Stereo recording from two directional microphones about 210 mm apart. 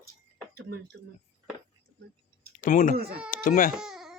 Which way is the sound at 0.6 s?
50° right (ahead or behind).